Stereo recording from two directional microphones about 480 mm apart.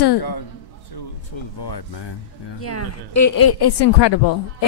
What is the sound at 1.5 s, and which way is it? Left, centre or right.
Speech, left.